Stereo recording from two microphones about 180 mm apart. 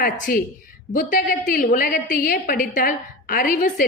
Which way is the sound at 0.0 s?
55° left (ahead or behind).